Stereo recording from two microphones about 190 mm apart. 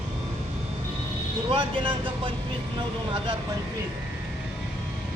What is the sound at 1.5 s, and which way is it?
Speech, 25° right (ahead or behind).